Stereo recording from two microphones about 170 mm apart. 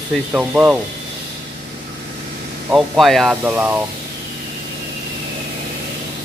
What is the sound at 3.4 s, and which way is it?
Speech, 10° right (ahead or behind).